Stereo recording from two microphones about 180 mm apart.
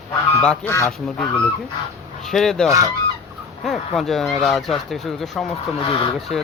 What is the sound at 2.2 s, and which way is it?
Speech, centre (ahead or behind).